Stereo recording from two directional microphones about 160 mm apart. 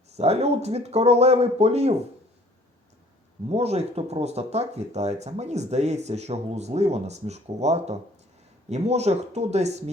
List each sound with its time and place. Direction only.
0.2 s speech: 40° right (ahead or behind)
3.5 s speech: 40° right (ahead or behind)